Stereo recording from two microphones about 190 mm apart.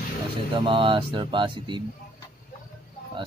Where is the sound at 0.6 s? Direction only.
25° right (ahead or behind).